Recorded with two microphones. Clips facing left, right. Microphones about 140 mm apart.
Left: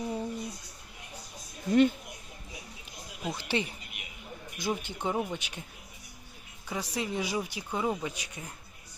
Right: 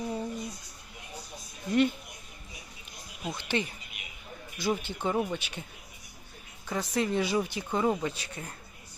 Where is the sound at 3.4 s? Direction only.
35° left (ahead or behind).